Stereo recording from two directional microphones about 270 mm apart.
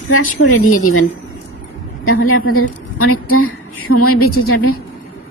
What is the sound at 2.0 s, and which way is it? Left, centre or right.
A woman's voice, left.